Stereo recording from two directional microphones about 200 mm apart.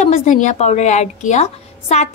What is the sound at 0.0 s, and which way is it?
A woman's voice, 35° left (ahead or behind).